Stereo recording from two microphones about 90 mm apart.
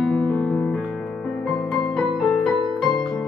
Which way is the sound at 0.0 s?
5° left (ahead or behind).